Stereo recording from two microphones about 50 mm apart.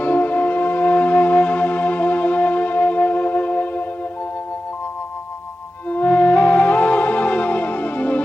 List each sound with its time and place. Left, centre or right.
0.0 s music: left
5.9 s music: left